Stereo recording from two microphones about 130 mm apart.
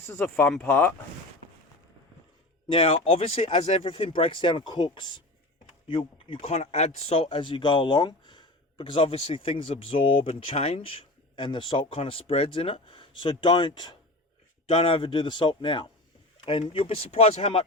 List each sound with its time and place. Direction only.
0.0 s speech: 15° left (ahead or behind)
2.6 s a man's voice: 45° left (ahead or behind)